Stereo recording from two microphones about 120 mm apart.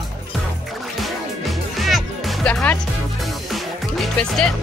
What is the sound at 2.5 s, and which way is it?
Music, 10° left (ahead or behind).